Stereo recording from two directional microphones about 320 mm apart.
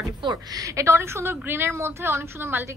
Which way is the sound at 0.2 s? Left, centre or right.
Centre.